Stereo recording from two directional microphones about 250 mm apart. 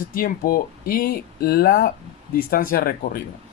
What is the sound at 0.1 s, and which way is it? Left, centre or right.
Speech, left.